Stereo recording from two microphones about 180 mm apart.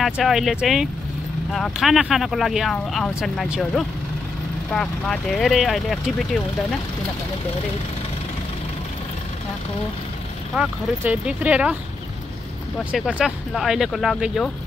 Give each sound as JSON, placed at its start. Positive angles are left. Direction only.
{"t": 0.0, "sound": "speech", "side_deg": 0}
{"t": 10.5, "sound": "speech", "side_deg": -5}
{"t": 12.7, "sound": "speech", "side_deg": 0}